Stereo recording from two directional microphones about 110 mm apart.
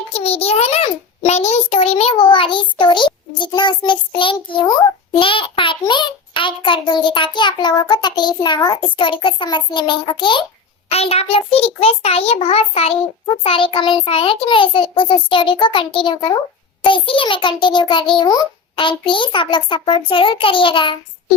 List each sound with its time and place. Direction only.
0.1 s a sound: 65° left (ahead or behind)
1.3 s a child's voice: 80° left; by 10.4 s 50° left (ahead or behind)
10.9 s a child's voice: 65° left (ahead or behind)
13.4 s a child's voice: 55° left (ahead or behind); by 18.4 s 40° left (ahead or behind)
18.8 s a child's voice: 50° left (ahead or behind)